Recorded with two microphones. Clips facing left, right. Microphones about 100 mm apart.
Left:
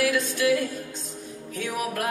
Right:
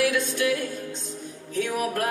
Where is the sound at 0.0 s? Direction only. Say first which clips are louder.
Even; 25° right (ahead or behind).